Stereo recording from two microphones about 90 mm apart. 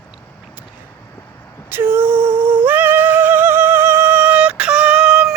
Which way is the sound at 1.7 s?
25° right (ahead or behind).